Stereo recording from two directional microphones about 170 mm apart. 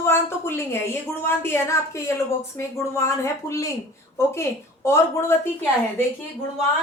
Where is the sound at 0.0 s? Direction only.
15° left (ahead or behind).